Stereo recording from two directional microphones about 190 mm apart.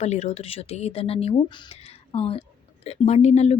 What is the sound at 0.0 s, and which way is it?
A woman's voice, 35° left (ahead or behind).